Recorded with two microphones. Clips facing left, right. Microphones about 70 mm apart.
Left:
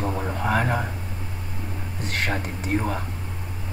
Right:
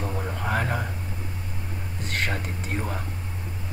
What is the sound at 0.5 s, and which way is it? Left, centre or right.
Speech, left.